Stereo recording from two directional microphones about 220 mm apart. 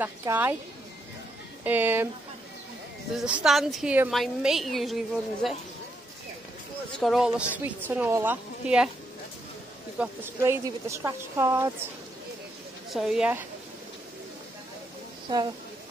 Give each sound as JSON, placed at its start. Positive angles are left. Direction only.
{"t": 0.0, "sound": "speech", "side_deg": -10}
{"t": 1.6, "sound": "a woman's voice", "side_deg": -10}
{"t": 3.3, "sound": "a woman's voice", "side_deg": -5}
{"t": 7.0, "sound": "a woman's voice", "side_deg": 0}
{"t": 9.9, "sound": "speech", "side_deg": -10}
{"t": 12.9, "sound": "a woman's voice", "side_deg": 0}
{"t": 15.2, "sound": "speech", "side_deg": -20}